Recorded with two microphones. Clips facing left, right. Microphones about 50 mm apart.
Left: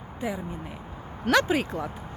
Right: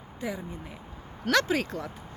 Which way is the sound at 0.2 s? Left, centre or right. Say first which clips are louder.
Left 3 dB; centre.